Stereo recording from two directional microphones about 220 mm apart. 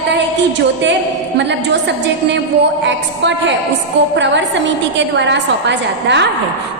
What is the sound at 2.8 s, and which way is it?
A woman's voice, 55° right (ahead or behind).